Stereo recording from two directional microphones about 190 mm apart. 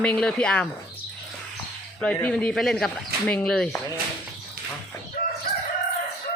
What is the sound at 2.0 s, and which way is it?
Speech, 5° left (ahead or behind).